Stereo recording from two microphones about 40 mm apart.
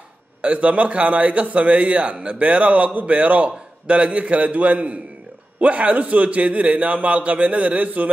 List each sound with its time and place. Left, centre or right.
0.4 s a man's voice: right